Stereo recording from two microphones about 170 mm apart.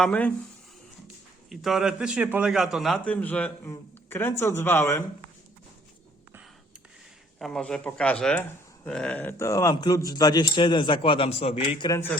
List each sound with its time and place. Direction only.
0.0 s a man's voice: 10° left (ahead or behind)
7.3 s speech: 5° left (ahead or behind); by 11.9 s 35° left (ahead or behind)
11.9 s a man's voice: 15° left (ahead or behind)